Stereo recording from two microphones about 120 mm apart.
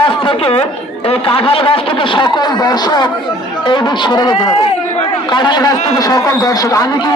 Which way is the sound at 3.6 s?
40° left (ahead or behind).